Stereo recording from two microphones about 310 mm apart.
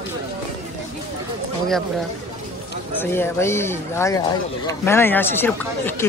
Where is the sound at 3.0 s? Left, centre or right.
Centre.